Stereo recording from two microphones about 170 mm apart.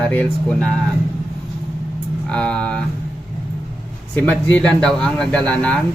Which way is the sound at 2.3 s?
5° left (ahead or behind).